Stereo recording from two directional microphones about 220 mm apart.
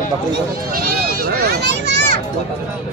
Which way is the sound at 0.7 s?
45° right (ahead or behind).